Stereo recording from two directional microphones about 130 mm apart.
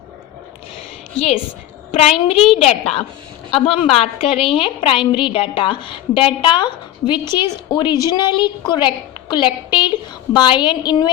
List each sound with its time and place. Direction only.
2.0 s a woman's voice: 50° left (ahead or behind)